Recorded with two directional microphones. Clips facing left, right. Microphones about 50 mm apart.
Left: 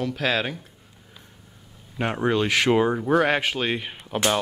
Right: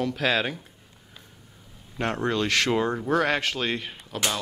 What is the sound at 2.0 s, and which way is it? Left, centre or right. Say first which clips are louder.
Speech: left 3 dB; centre.